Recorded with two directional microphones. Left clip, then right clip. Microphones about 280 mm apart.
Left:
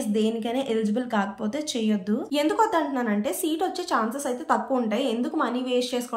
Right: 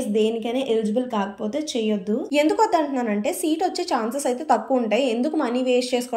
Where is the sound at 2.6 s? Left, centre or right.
Left.